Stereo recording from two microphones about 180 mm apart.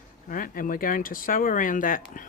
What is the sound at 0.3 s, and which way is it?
Speech, 50° left (ahead or behind).